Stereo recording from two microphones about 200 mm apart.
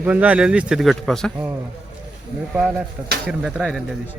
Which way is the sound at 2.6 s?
5° right (ahead or behind).